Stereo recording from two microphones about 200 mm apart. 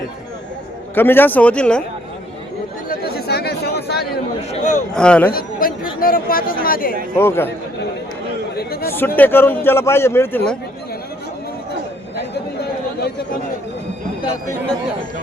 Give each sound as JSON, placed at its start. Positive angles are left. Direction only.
{"t": 0.9, "sound": "a man's voice", "side_deg": 10}
{"t": 2.9, "sound": "a sound", "side_deg": 50}
{"t": 4.4, "sound": "a sound", "side_deg": 35}
{"t": 4.9, "sound": "speech", "side_deg": 5}
{"t": 5.3, "sound": "speech", "side_deg": 45}
{"t": 7.2, "sound": "a man's voice", "side_deg": 10}
{"t": 8.5, "sound": "chatter", "side_deg": 50}
{"t": 8.9, "sound": "a man's voice", "side_deg": 10}
{"t": 13.0, "sound": "chatter", "side_deg": 55}